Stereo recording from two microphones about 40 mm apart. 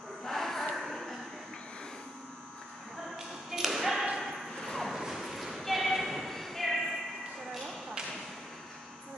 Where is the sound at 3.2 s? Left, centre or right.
Centre.